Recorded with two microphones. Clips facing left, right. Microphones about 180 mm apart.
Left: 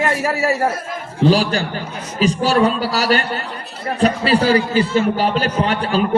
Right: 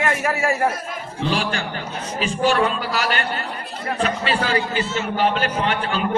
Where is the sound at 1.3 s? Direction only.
40° left (ahead or behind).